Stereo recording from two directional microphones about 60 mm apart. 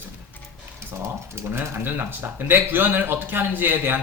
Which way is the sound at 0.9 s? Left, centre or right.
Right.